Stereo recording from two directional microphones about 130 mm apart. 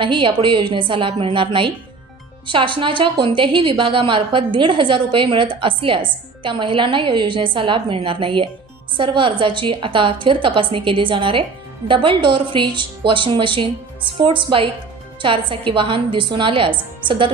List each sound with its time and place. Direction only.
0.0 s a woman's voice: 40° right (ahead or behind)